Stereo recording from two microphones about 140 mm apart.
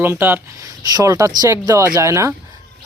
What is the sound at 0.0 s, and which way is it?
Speech, 15° right (ahead or behind).